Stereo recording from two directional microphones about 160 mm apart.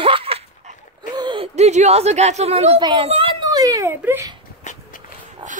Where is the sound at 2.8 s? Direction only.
35° right (ahead or behind); by 4.3 s 15° right (ahead or behind).